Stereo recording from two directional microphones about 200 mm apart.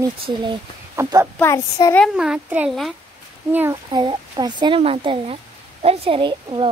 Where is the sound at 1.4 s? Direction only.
15° left (ahead or behind).